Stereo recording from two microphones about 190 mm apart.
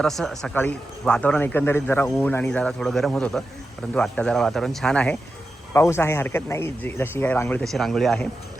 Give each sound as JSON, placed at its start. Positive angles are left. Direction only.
{"t": 0.0, "sound": "a man's voice", "side_deg": 0}